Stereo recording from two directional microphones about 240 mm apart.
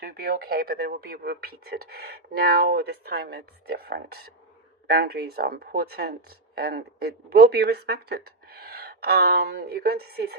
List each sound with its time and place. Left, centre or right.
0.0 s speech: right